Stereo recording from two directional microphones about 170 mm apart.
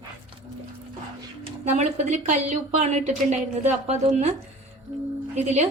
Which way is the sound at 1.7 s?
45° right (ahead or behind).